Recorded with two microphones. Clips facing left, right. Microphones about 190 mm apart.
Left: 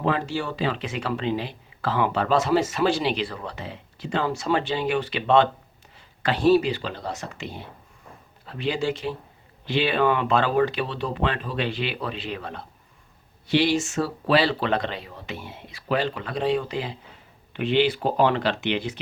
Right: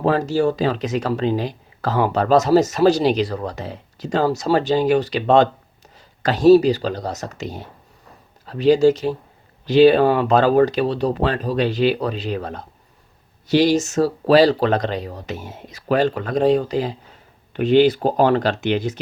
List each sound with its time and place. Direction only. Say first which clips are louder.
0.0 s speech: right 8 dB; 40° right (ahead or behind)